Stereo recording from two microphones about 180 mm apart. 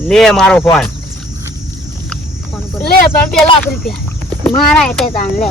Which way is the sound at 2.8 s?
60° left (ahead or behind).